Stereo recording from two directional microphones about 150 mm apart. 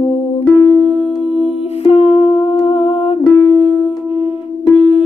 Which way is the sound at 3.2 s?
10° right (ahead or behind).